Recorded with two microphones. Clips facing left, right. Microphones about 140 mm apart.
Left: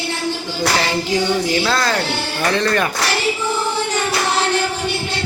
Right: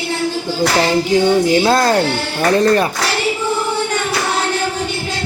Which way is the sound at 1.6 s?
45° right (ahead or behind).